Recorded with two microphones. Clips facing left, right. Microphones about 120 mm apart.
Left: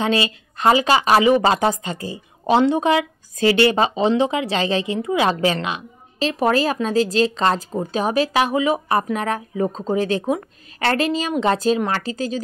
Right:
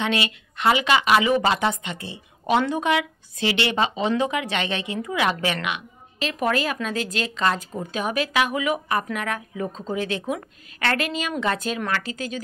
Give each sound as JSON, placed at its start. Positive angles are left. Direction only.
{"t": 0.0, "sound": "a woman's voice", "side_deg": 35}